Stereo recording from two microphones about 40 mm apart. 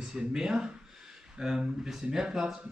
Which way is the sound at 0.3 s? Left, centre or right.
Centre.